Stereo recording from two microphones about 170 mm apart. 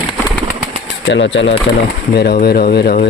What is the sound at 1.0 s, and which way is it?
Speech, 90° left.